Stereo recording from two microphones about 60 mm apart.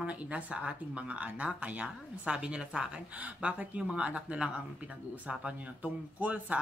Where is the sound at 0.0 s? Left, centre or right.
Right.